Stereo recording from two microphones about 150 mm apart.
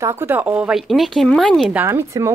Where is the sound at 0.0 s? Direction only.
15° right (ahead or behind); by 1.7 s 5° left (ahead or behind).